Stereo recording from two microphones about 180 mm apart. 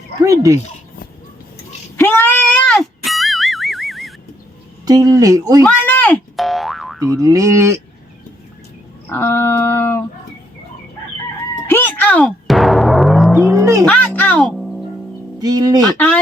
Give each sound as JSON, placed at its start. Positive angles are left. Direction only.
{"t": 0.3, "sound": "speech", "side_deg": -15}
{"t": 2.0, "sound": "music", "side_deg": 10}
{"t": 4.9, "sound": "speech", "side_deg": -20}
{"t": 5.6, "sound": "boing", "side_deg": 10}
{"t": 7.1, "sound": "speech", "side_deg": -15}
{"t": 9.0, "sound": "a sound", "side_deg": 15}
{"t": 11.7, "sound": "timpani", "side_deg": 10}
{"t": 13.6, "sound": "a sound", "side_deg": -15}
{"t": 13.8, "sound": "music", "side_deg": 10}
{"t": 15.4, "sound": "speech", "side_deg": -20}